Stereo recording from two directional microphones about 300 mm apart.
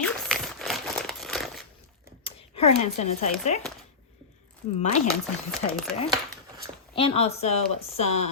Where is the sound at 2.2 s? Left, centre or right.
Centre.